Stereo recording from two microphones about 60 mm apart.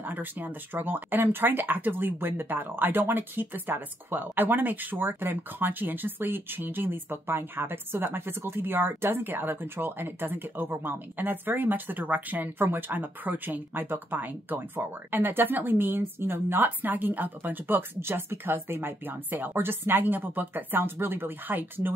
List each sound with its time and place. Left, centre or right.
0.0 s speech: right